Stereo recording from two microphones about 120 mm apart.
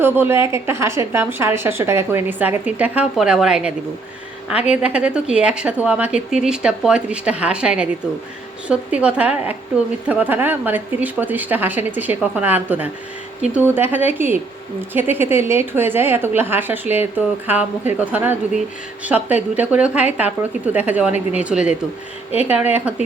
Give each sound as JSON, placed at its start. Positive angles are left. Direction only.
{"t": 0.0, "sound": "a woman's voice", "side_deg": -20}
{"t": 13.9, "sound": "a woman's voice", "side_deg": -15}